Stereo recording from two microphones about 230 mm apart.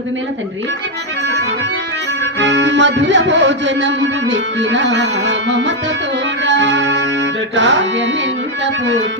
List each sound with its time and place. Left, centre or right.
2.4 s music: right